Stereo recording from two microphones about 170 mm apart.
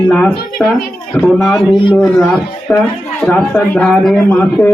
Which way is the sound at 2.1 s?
5° left (ahead or behind).